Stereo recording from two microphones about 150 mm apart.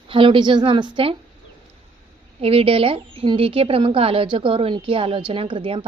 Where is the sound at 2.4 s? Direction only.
40° right (ahead or behind).